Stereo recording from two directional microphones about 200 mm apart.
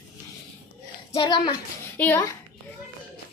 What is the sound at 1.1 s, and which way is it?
Speech, 25° left (ahead or behind).